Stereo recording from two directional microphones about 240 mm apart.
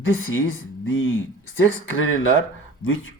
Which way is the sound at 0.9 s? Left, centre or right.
Left.